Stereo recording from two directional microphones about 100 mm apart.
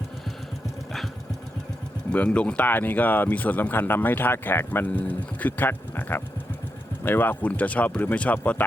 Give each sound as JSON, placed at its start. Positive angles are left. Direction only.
{"t": 2.1, "sound": "speech", "side_deg": 10}